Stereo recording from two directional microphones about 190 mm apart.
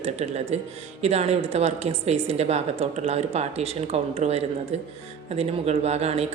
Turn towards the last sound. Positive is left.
turn(degrees=-35)  # may be behind; listen again after turning